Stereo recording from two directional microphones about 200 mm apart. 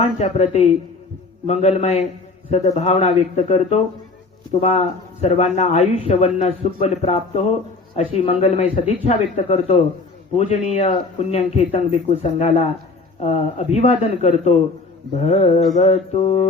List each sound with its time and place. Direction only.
0.0 s a man's voice: 30° left (ahead or behind)